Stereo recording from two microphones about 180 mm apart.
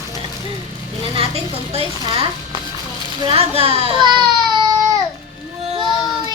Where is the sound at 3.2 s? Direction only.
35° right (ahead or behind).